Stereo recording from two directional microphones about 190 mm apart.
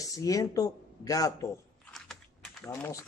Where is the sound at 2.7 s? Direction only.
15° left (ahead or behind).